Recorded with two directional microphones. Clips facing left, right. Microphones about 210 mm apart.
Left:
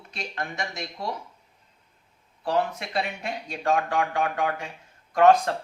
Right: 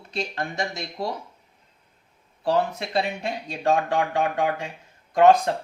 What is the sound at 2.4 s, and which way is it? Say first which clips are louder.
Speech: right 3 dB; 30° right (ahead or behind).